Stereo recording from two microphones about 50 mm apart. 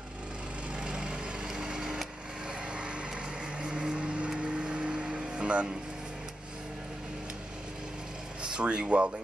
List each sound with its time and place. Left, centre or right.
0.7 s vehicle: centre
2.7 s vehicle: right
8.4 s a sound: right
8.8 s speech: right